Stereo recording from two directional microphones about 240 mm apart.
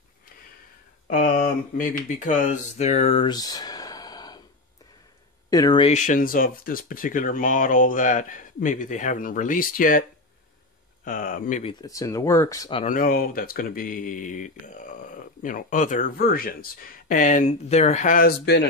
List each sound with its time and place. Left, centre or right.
1.0 s speech: left; by 4.4 s centre
5.5 s speech: centre; by 10.0 s left
11.1 s speech: left
11.8 s speech: centre
12.8 s speech: left